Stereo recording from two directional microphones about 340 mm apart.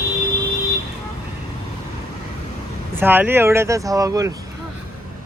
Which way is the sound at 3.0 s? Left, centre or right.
Centre.